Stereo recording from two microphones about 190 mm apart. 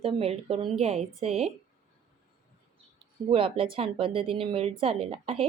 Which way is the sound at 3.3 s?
30° right (ahead or behind).